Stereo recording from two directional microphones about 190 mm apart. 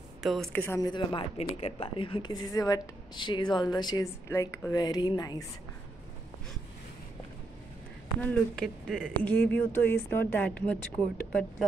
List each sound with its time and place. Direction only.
0.2 s speech: centre (ahead or behind)
0.7 s a woman's voice: 25° left (ahead or behind)
8.2 s speech: 5° left (ahead or behind)
9.1 s speech: 10° left (ahead or behind)